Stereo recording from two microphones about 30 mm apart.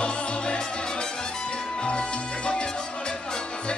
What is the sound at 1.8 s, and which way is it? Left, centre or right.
Music, left.